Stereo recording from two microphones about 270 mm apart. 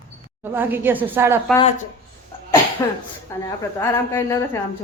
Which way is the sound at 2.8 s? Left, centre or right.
Centre.